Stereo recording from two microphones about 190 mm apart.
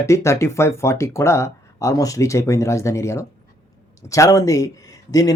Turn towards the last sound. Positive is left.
turn(degrees=20)  # may be behind; listen again after turning